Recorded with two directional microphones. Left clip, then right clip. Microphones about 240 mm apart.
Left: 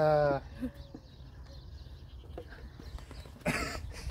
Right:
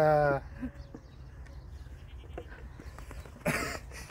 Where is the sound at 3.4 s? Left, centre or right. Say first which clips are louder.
Right 2 dB; right.